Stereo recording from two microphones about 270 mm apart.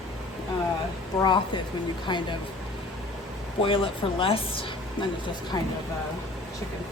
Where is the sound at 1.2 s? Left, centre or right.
Centre.